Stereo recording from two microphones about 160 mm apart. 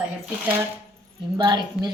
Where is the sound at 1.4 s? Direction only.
25° right (ahead or behind).